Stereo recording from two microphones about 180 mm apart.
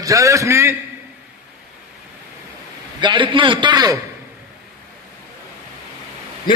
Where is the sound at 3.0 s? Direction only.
25° right (ahead or behind).